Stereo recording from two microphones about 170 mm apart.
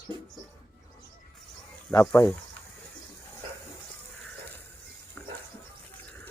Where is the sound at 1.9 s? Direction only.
10° left (ahead or behind).